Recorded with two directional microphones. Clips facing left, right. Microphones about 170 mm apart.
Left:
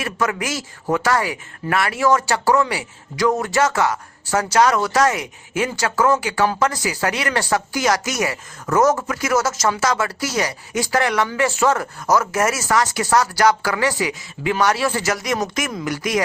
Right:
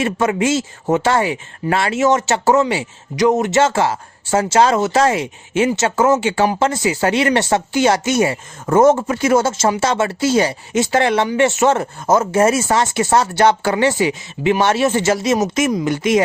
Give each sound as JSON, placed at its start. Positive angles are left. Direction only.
{"t": 0.0, "sound": "speech", "side_deg": -25}